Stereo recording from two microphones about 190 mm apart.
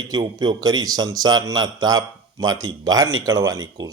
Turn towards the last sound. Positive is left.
turn(degrees=-20)  # may be behind; listen again after turning